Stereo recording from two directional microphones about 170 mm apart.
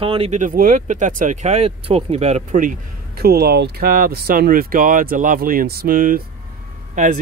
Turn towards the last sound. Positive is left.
turn(degrees=-45)  # may be behind; listen again after turning